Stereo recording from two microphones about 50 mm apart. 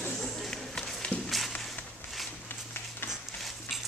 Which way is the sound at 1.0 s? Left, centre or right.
Left.